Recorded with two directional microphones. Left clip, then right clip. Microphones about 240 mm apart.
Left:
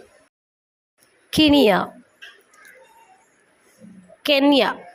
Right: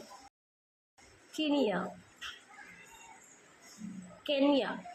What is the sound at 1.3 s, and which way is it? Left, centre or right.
Speech, left.